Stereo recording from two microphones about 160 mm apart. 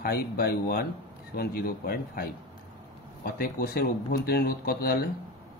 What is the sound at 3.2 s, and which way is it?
Speech, 65° left (ahead or behind).